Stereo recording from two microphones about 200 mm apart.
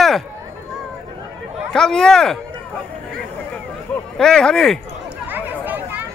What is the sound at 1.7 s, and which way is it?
Speech, 5° left (ahead or behind).